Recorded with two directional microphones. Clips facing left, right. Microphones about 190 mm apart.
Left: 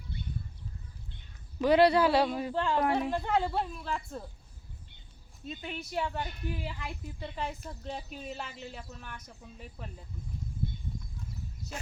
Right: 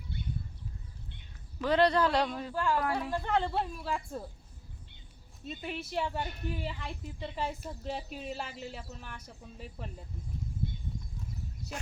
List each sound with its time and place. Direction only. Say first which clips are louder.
1.6 s speech: left 3 dB; 10° left (ahead or behind)
2.5 s speech: left 2 dB; 25° left (ahead or behind)
3.3 s a woman's voice: right 2 dB; 5° left (ahead or behind)
5.5 s a woman's voice: right 1 dB; 5° right (ahead or behind)
11.7 s a woman's voice: even; centre (ahead or behind)